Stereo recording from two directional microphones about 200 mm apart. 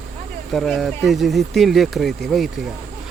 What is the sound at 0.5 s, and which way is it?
Speech, centre (ahead or behind).